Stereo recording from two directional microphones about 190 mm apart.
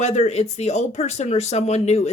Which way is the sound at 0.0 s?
35° left (ahead or behind).